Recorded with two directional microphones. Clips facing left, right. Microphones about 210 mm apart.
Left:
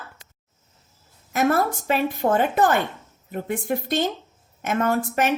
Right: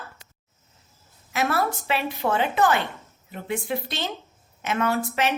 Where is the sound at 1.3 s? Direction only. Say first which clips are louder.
Left 4 dB; 45° left (ahead or behind).